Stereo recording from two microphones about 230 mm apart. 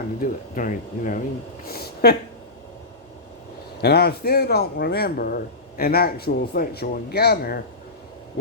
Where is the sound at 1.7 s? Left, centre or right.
Left.